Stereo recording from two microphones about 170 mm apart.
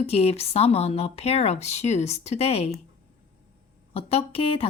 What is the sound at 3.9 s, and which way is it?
Speech, 35° left (ahead or behind).